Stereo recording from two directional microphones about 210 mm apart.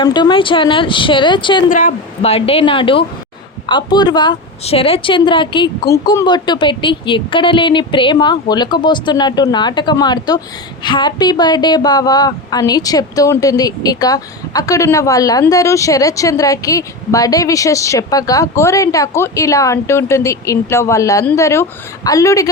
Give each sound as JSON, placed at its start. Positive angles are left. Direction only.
{"t": 0.0, "sound": "a woman's voice", "side_deg": 20}
{"t": 1.7, "sound": "a woman's voice", "side_deg": 35}